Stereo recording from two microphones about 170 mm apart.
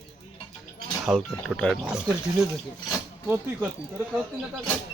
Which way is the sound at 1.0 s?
Centre (ahead or behind).